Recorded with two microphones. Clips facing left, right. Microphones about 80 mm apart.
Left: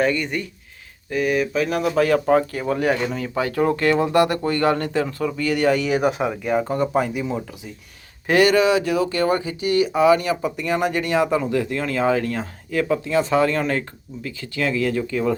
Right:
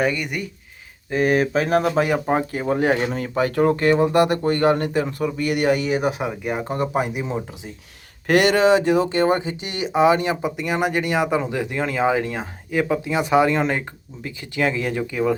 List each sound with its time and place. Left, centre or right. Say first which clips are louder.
0.0 s speech: left 1 dB; centre
1.1 s speech: right 2 dB; right
2.0 s speech: left 3 dB; centre
3.0 s speech: right 2 dB; right
3.8 s speech: left 1 dB; right
5.7 s speech: left 1 dB; right
6.0 s speech: left 2 dB; left
6.4 s speech: left 3 dB; centre